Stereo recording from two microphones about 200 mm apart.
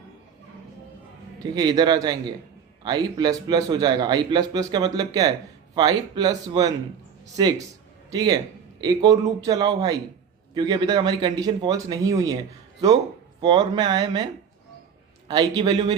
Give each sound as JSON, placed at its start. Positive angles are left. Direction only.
{"t": 1.5, "sound": "a man's voice", "side_deg": -20}
{"t": 13.4, "sound": "a man's voice", "side_deg": -20}
{"t": 15.3, "sound": "a man's voice", "side_deg": -20}